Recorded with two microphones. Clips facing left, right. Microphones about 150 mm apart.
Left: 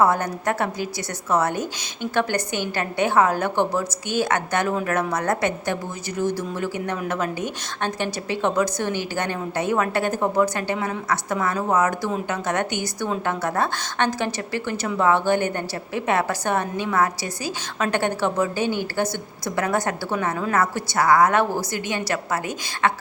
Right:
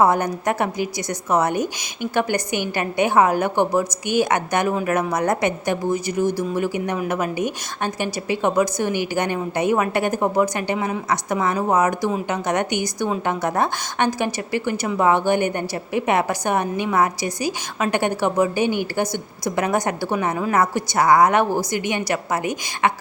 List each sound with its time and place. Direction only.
0.0 s a woman's voice: 15° right (ahead or behind)